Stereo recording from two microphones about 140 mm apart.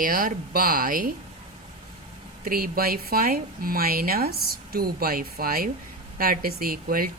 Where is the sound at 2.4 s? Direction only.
90° right.